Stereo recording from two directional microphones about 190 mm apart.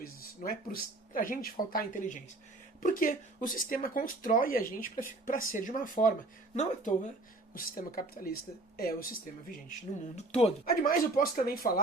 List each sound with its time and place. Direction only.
0.0 s speech: 50° left (ahead or behind)
7.5 s speech: 50° left (ahead or behind)
10.2 s speech: 30° left (ahead or behind)
10.8 s speech: 50° left (ahead or behind)